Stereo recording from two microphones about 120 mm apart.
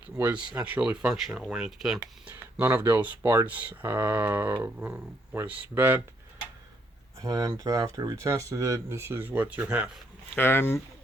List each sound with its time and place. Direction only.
0.2 s speech: 15° right (ahead or behind)
7.2 s speech: 30° right (ahead or behind); by 9.9 s 10° right (ahead or behind)
10.2 s speech: 20° left (ahead or behind)